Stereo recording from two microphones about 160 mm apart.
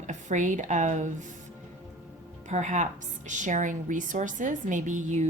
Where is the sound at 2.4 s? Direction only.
45° right (ahead or behind).